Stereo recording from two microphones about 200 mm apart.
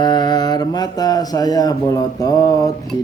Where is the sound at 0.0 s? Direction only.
20° left (ahead or behind).